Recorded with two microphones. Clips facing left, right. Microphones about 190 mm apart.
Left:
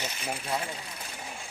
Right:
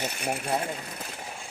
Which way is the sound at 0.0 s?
55° right (ahead or behind).